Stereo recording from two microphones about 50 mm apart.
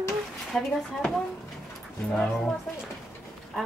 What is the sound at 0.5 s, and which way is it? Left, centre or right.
Speech, centre.